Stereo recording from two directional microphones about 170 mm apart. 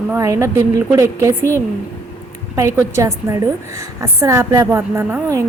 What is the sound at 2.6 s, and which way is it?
A woman's voice, 15° right (ahead or behind).